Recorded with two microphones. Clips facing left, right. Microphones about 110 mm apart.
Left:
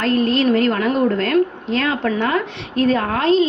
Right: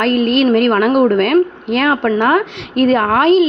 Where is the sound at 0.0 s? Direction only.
65° right (ahead or behind).